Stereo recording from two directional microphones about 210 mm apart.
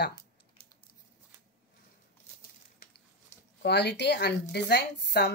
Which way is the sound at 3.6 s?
50° left (ahead or behind).